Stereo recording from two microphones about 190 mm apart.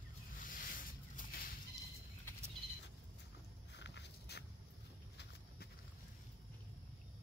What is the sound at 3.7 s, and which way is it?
Walk, 65° left (ahead or behind).